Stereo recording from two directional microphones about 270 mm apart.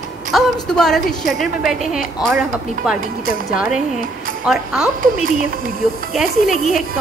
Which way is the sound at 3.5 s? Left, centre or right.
Centre.